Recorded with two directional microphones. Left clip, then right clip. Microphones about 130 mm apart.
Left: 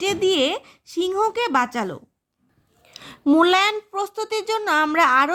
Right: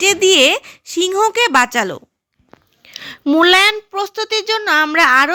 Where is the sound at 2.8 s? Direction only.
10° right (ahead or behind).